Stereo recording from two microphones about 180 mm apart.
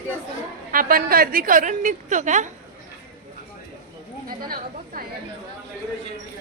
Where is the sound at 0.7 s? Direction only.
50° right (ahead or behind).